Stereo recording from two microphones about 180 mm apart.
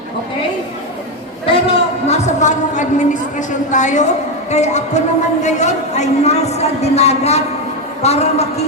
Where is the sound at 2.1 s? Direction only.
40° left (ahead or behind).